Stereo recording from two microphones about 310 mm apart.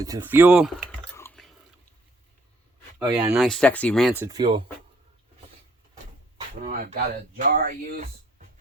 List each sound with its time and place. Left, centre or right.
0.0 s typing: centre
3.0 s speech: centre
4.3 s speech: centre
5.9 s vehicle: centre
6.8 s speech: right